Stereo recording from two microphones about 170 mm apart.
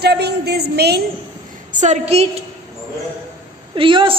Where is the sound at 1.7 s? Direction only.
45° right (ahead or behind).